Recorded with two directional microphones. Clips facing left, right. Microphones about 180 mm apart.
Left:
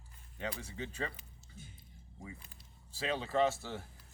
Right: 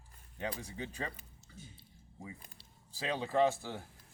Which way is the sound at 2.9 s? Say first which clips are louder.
Right 1 dB; 15° right (ahead or behind).